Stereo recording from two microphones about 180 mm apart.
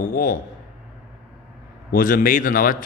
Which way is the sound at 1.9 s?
50° left (ahead or behind).